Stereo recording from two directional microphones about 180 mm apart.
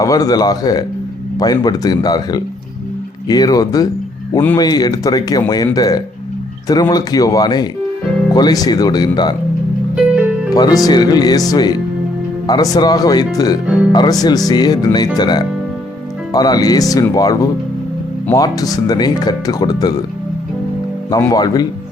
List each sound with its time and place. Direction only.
0.0 s speech: 20° left (ahead or behind)
9.9 s music: 5° right (ahead or behind)
10.5 s speech: 20° left (ahead or behind)
21.1 s speech: 20° left (ahead or behind)